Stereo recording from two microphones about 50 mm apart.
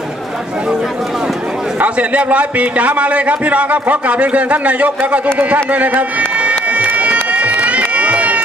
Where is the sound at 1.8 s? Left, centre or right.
Right.